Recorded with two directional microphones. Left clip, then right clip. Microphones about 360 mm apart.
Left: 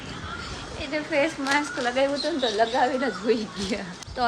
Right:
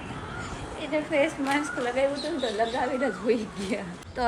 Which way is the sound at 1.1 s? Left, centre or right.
Centre.